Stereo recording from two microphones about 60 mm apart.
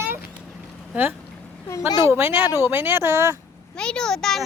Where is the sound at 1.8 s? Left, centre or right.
Right.